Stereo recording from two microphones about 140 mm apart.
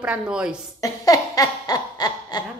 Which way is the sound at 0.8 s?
25° left (ahead or behind).